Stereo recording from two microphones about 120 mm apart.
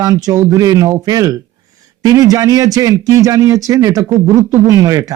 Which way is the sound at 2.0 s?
30° right (ahead or behind).